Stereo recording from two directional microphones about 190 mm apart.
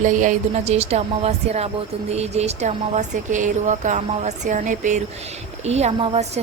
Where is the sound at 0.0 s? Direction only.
40° right (ahead or behind).